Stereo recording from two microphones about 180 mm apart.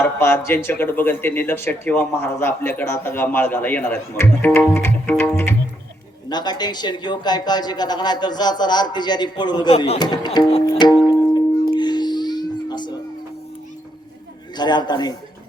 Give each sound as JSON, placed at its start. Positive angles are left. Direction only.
{"t": 0.0, "sound": "speech", "side_deg": 15}
{"t": 6.2, "sound": "a man's voice", "side_deg": 25}
{"t": 10.0, "sound": "music", "side_deg": 25}
{"t": 14.5, "sound": "a man's voice", "side_deg": 25}